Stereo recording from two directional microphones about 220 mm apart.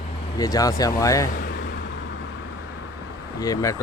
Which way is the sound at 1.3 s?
40° left (ahead or behind).